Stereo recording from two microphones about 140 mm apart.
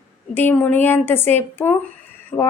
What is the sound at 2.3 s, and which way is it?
Speech, 30° left (ahead or behind).